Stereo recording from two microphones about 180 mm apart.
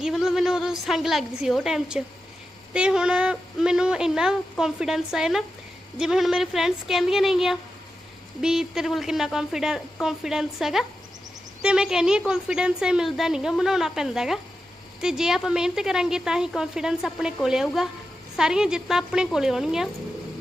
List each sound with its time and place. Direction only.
0.0 s a woman's voice: centre (ahead or behind)